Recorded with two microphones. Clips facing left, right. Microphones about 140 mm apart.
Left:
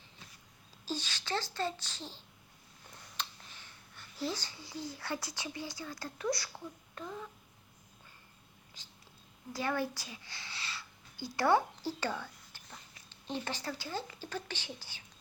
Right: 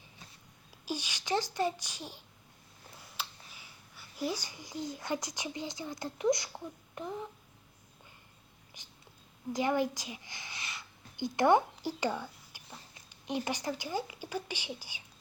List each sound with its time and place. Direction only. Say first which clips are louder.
0.9 s a child's voice: right 3 dB; 15° right (ahead or behind)
6.9 s a sound: right 5 dB; 20° right (ahead or behind)
8.8 s whispering: right 2 dB; 15° right (ahead or behind)
9.5 s speech: right 5 dB; 15° right (ahead or behind)